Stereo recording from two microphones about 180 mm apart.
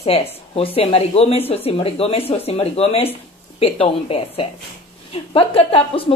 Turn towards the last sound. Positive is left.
turn(degrees=30)  # may be behind; listen again after turning